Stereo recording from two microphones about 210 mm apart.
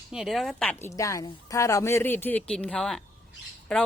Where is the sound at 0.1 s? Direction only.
Centre (ahead or behind).